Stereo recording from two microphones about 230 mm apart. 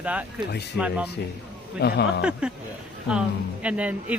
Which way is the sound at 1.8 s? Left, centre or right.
Left.